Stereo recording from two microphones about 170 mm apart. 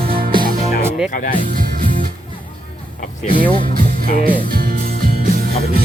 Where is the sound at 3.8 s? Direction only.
60° right (ahead or behind).